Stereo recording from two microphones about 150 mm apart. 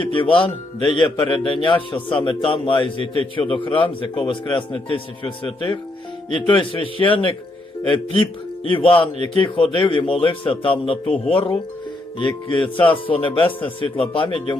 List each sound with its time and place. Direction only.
0.0 s a man's voice: 35° left (ahead or behind)